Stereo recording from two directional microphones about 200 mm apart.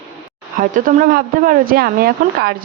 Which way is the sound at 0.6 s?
40° right (ahead or behind).